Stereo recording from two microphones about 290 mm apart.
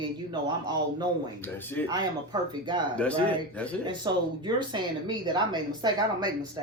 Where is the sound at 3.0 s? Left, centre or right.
Centre.